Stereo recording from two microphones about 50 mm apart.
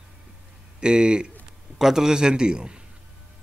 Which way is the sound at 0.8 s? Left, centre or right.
Centre.